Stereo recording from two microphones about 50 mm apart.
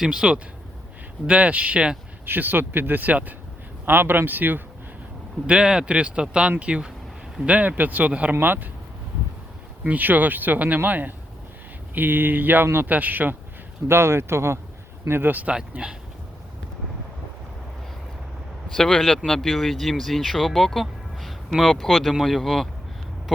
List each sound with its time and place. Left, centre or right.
0.0 s speech: centre
1.3 s speech: right
2.2 s speech: right
3.8 s speech: right
5.5 s speech: centre
8.4 s speech: right
9.8 s speech: right
13.8 s speech: right
15.0 s a man's voice: right
15.4 s speech: right
18.8 s speech: centre